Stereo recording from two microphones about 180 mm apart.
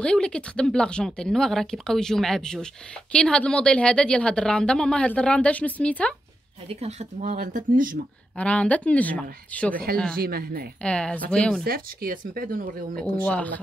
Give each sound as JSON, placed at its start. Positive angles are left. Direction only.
{"t": 0.0, "sound": "speech", "side_deg": 5}
{"t": 6.7, "sound": "speech", "side_deg": -35}
{"t": 8.4, "sound": "speech", "side_deg": 5}
{"t": 10.2, "sound": "speech", "side_deg": -55}
{"t": 10.8, "sound": "speech", "side_deg": 5}
{"t": 11.6, "sound": "speech", "side_deg": -55}
{"t": 12.9, "sound": "speech", "side_deg": 10}